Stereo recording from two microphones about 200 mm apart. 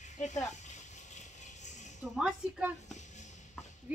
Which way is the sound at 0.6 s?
35° left (ahead or behind).